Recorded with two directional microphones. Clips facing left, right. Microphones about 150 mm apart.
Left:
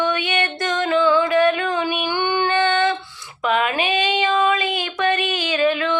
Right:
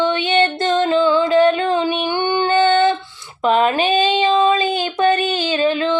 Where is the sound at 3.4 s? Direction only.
30° right (ahead or behind).